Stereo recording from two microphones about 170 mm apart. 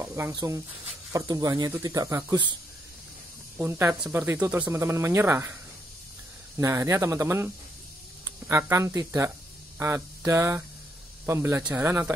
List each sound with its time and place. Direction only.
0.0 s speech: 15° right (ahead or behind)
3.5 s speech: 15° right (ahead or behind)
9.8 s a sound: 15° right (ahead or behind)
11.2 s speech: 15° right (ahead or behind)